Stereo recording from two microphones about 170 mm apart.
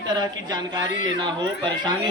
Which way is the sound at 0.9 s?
50° left (ahead or behind).